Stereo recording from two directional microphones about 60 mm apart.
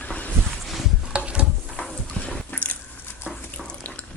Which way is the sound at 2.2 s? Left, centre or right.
Left.